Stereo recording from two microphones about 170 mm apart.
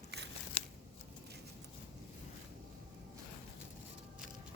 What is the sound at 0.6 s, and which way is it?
Scissors, 40° left (ahead or behind).